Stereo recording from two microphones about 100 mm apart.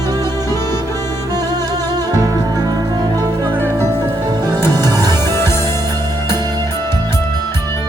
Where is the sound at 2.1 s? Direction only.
40° right (ahead or behind).